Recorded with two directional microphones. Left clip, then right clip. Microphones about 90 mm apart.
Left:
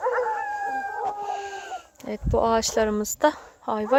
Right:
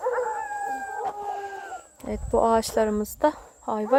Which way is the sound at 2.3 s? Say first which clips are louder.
Right 1 dB; 40° right (ahead or behind).